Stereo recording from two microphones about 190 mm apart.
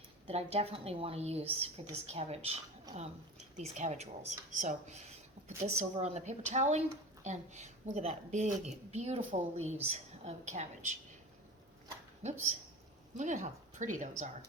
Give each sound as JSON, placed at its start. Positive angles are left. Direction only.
{"t": 0.3, "sound": "a woman's voice", "side_deg": -30}
{"t": 12.2, "sound": "a woman's voice", "side_deg": -35}